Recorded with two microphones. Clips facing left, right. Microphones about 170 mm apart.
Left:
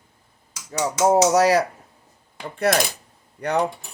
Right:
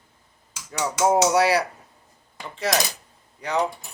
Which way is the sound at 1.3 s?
45° left (ahead or behind).